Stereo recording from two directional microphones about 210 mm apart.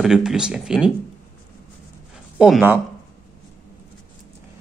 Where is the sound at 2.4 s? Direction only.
5° right (ahead or behind).